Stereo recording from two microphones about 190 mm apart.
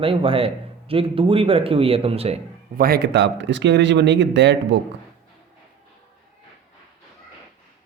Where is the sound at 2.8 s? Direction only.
55° right (ahead or behind).